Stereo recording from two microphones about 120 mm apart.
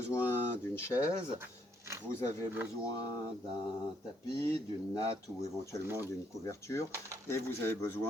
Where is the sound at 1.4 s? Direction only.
20° right (ahead or behind).